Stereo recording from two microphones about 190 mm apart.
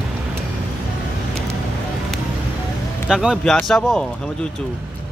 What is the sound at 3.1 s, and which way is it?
Speech, 5° right (ahead or behind).